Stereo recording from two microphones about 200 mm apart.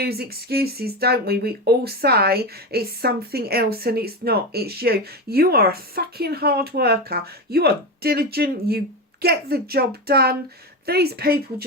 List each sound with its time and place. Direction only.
0.0 s speech: 50° right (ahead or behind)